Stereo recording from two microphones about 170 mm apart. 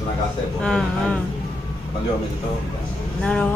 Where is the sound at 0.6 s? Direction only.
5° left (ahead or behind).